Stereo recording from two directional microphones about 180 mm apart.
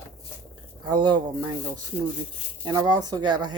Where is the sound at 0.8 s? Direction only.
25° right (ahead or behind).